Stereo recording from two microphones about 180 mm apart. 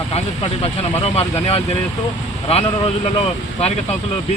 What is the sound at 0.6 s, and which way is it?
Speech, 35° left (ahead or behind).